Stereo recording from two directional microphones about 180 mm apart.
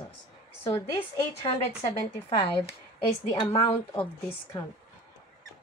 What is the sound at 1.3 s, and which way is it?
Speech, 30° left (ahead or behind).